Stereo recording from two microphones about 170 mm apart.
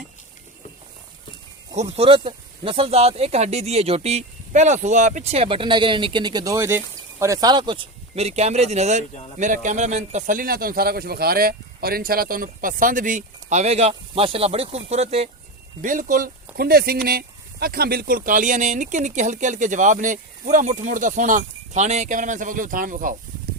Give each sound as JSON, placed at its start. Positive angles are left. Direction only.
{"t": 1.7, "sound": "speech", "side_deg": -40}
{"t": 15.8, "sound": "speech", "side_deg": -50}